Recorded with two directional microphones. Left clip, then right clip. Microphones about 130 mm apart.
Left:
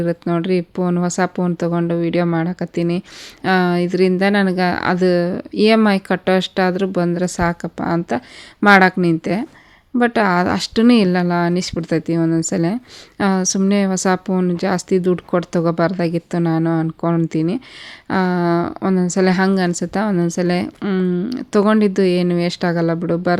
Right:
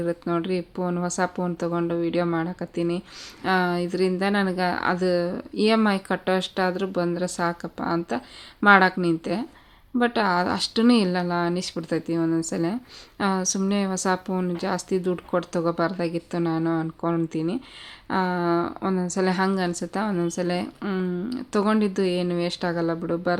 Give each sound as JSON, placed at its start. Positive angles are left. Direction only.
{"t": 0.0, "sound": "speech", "side_deg": 40}